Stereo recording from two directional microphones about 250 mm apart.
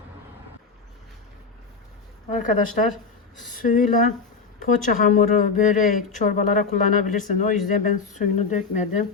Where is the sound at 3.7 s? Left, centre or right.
Left.